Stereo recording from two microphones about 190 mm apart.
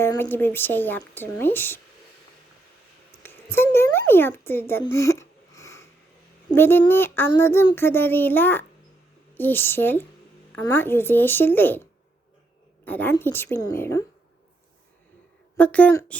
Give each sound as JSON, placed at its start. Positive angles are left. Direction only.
{"t": 0.0, "sound": "speech", "side_deg": 10}
{"t": 3.2, "sound": "speech", "side_deg": 10}
{"t": 4.8, "sound": "a sound", "side_deg": 15}
{"t": 6.5, "sound": "speech", "side_deg": 10}
{"t": 15.5, "sound": "speech", "side_deg": 5}